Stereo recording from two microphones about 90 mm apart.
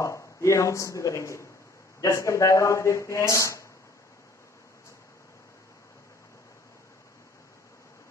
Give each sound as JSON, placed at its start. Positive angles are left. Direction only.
{"t": 0.0, "sound": "speech", "side_deg": 35}